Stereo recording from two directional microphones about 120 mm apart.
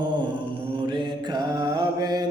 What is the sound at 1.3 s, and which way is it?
Music, 35° right (ahead or behind).